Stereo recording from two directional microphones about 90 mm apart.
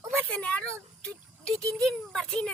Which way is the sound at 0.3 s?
15° left (ahead or behind).